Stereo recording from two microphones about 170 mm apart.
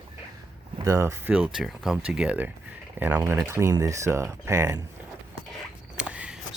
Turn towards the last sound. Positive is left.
turn(degrees=-5)  # may be behind; listen again after turning